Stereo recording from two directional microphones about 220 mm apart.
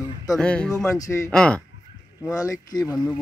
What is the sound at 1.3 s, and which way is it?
Speech, 5° left (ahead or behind).